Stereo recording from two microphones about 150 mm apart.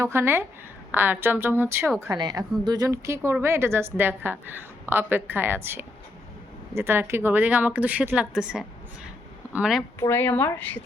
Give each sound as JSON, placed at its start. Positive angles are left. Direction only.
{"t": 0.0, "sound": "a woman's voice", "side_deg": -15}
{"t": 2.0, "sound": "a woman's voice", "side_deg": -25}
{"t": 10.0, "sound": "a woman's voice", "side_deg": 15}